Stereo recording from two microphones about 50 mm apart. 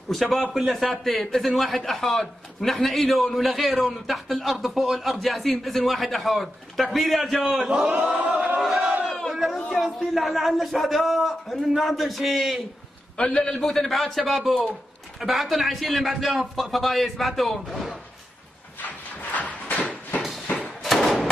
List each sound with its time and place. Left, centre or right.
0.1 s a man's voice: centre
7.6 s speech: centre
8.1 s chant: right
8.5 s battle cry: centre
9.3 s a man's voice: centre
13.2 s a man's voice: left
13.5 s a man's voice: centre
19.3 s a sound: left
20.2 s a sound: centre